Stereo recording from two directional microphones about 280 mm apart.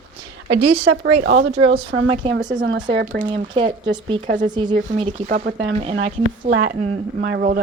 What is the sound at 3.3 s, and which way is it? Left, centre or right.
Speech, centre.